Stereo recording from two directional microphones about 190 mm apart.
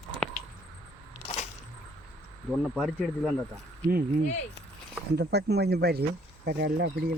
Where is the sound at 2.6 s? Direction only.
Centre (ahead or behind).